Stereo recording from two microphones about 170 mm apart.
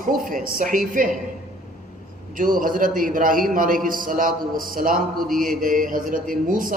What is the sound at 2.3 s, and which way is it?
A man's voice, 50° right (ahead or behind).